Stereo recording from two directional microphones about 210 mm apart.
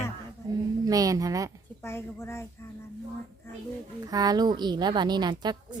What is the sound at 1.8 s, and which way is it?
Speech, 10° left (ahead or behind).